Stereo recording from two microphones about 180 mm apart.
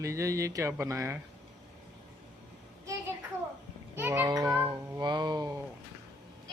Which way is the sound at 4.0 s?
15° right (ahead or behind).